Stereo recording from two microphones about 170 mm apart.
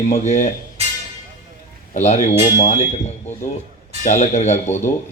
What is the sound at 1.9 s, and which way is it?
Speech, 40° left (ahead or behind).